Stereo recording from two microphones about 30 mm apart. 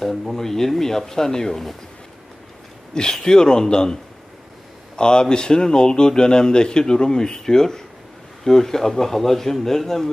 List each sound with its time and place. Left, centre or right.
0.3 s speech: centre
2.9 s speech: left
4.9 s speech: left; by 10.1 s centre